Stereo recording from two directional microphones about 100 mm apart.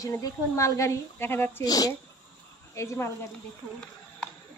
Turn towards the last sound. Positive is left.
turn(degrees=25)  # may be behind; listen again after turning